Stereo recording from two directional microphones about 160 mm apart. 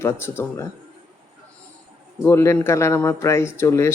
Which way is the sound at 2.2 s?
15° left (ahead or behind).